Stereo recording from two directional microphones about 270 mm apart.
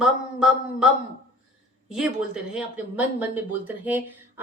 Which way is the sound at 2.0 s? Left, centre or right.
Centre.